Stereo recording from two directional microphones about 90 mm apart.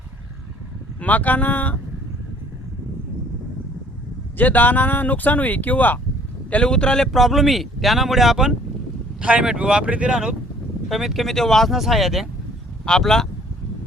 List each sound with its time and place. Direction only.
0.9 s speech: 15° left (ahead or behind)
4.4 s speech: 20° left (ahead or behind)